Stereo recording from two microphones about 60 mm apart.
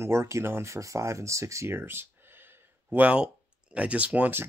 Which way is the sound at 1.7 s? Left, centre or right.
Right.